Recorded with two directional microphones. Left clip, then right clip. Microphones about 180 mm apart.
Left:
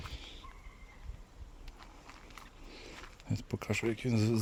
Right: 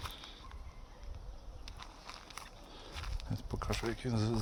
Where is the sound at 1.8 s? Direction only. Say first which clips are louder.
Right 4 dB; 75° right (ahead or behind).